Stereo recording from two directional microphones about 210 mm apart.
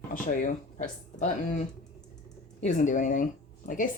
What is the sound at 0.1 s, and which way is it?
Speech, 40° left (ahead or behind).